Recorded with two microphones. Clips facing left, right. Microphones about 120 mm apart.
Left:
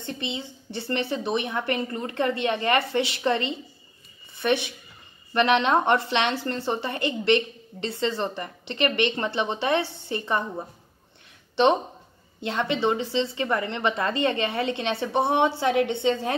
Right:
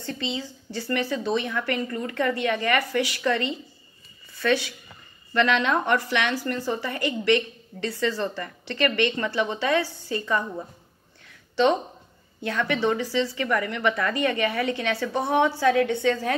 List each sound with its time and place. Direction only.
0.0 s a woman's voice: 20° left (ahead or behind)
11.5 s a woman's voice: 25° left (ahead or behind)